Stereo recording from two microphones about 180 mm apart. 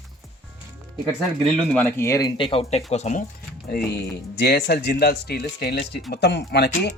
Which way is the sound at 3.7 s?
60° left (ahead or behind).